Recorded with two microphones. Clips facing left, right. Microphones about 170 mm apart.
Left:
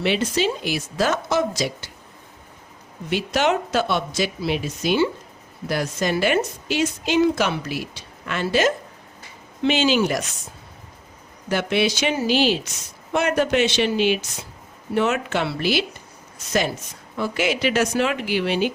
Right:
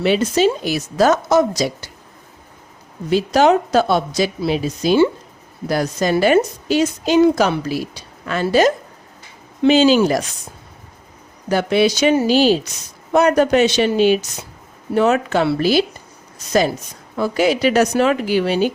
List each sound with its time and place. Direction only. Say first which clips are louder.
0.0 s a woman's voice: right 6 dB; 40° right (ahead or behind)
3.1 s a woman's voice: right 7 dB; 35° right (ahead or behind)
9.7 s a woman's voice: right 7 dB; 35° right (ahead or behind)
11.4 s a woman's voice: right 6 dB; 40° right (ahead or behind)
17.2 s a woman's voice: right 6 dB; 40° right (ahead or behind)